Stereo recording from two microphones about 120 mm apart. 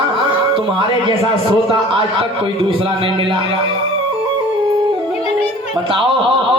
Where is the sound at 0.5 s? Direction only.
45° right (ahead or behind).